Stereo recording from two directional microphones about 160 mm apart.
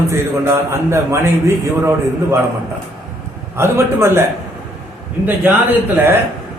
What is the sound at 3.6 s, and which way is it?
Speech, 15° right (ahead or behind).